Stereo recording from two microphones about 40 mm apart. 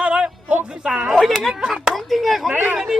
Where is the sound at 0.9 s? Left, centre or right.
Centre.